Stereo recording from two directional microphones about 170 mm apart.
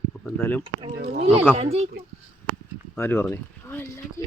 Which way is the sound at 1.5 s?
40° right (ahead or behind).